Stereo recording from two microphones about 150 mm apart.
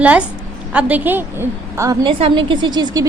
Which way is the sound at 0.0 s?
10° right (ahead or behind).